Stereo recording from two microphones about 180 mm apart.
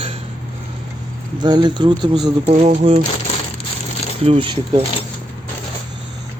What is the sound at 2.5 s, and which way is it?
Speech, 35° right (ahead or behind).